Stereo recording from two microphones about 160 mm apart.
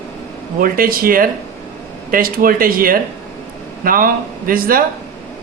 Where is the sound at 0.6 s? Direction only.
65° right (ahead or behind).